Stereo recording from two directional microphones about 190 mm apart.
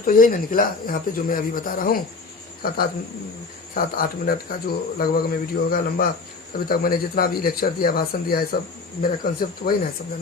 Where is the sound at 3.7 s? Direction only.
50° left (ahead or behind).